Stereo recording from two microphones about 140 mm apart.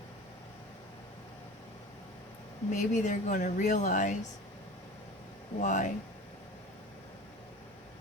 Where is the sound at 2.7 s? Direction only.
60° left (ahead or behind).